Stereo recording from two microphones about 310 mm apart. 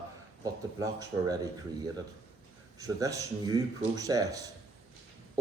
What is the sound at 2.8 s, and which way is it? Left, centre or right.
Speech, centre.